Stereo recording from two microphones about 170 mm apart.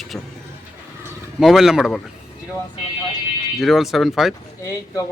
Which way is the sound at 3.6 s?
Centre (ahead or behind).